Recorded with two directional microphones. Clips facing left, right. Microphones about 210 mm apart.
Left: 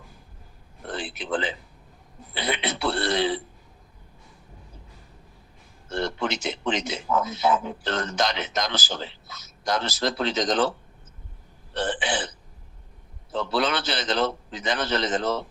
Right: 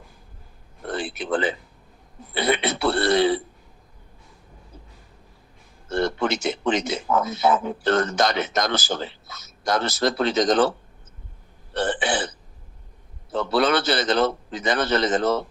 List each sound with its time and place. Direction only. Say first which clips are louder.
0.9 s a man's voice: right 4 dB; 45° right (ahead or behind)
5.9 s a man's voice: right 4 dB; 50° right (ahead or behind)
11.8 s burping: right 3 dB; 45° right (ahead or behind)
13.3 s a man's voice: right 5 dB; 50° right (ahead or behind)